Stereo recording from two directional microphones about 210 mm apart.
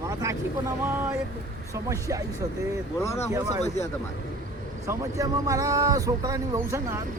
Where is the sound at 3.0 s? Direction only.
15° left (ahead or behind).